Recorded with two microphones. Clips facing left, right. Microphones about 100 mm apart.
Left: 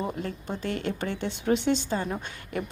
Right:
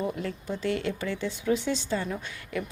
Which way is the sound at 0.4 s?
50° left (ahead or behind).